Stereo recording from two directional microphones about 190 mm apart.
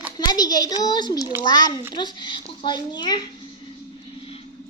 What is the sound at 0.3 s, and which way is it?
Speech, 20° left (ahead or behind).